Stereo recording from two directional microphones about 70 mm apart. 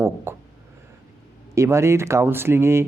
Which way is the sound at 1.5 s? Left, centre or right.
Right.